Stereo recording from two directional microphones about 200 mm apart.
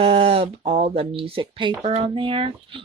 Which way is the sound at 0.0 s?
30° right (ahead or behind).